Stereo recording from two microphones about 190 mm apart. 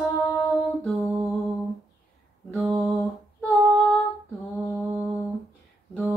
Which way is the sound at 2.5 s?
Centre (ahead or behind).